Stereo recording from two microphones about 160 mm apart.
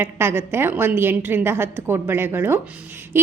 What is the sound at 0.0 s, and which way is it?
A woman's voice, 15° right (ahead or behind).